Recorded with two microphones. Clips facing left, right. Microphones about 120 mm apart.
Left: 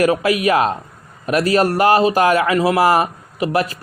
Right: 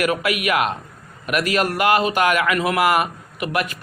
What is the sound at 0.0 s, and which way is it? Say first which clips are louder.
A man's voice: left 6 dB; 30° left (ahead or behind).